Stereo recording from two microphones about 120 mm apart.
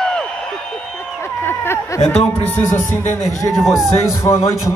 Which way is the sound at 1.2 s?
15° left (ahead or behind).